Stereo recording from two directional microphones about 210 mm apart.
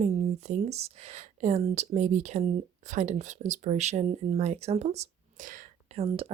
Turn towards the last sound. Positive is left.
turn(degrees=-30)  # may be behind; listen again after turning